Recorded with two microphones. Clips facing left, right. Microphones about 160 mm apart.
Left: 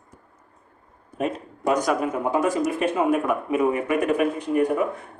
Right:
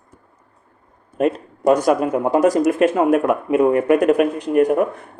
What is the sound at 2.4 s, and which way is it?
Speech, 75° right (ahead or behind).